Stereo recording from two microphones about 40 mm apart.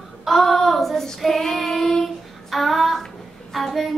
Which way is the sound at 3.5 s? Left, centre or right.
Centre.